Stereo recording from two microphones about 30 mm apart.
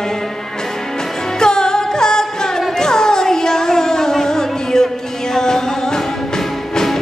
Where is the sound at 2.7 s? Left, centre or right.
Centre.